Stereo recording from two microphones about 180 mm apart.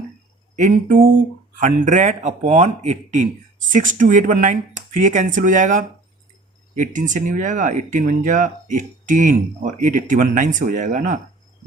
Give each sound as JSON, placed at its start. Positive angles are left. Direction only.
{"t": 0.5, "sound": "speech", "side_deg": -45}